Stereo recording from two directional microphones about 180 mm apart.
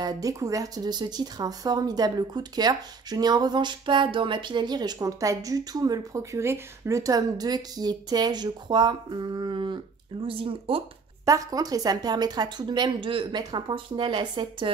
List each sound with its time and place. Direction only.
0.0 s speech: 20° right (ahead or behind)
11.2 s speech: 20° right (ahead or behind)